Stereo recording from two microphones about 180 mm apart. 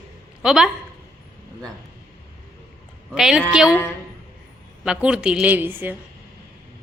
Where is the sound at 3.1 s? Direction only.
5° right (ahead or behind).